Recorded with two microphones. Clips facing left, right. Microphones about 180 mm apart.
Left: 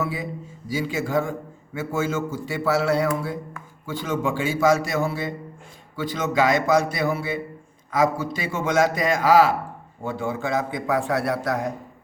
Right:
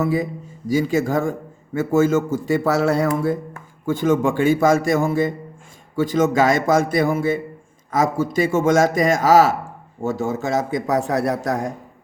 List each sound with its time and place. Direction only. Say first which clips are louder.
0.0 s a man's voice: right 7 dB; 45° right (ahead or behind)